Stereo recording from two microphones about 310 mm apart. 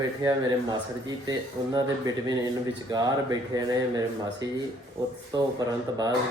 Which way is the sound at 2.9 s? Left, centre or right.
Centre.